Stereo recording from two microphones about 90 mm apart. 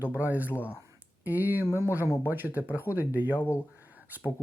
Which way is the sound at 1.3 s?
20° right (ahead or behind).